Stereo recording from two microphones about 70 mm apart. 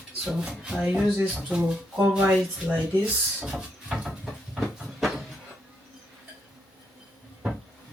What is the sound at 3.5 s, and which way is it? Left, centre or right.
Cupboard open or close, centre.